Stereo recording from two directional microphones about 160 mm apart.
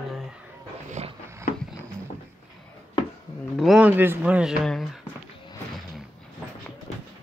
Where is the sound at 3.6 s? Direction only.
5° right (ahead or behind).